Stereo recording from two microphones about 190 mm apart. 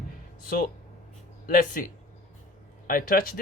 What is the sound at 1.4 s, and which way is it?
Speech, 45° left (ahead or behind).